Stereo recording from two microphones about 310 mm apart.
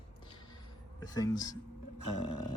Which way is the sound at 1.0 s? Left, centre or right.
Centre.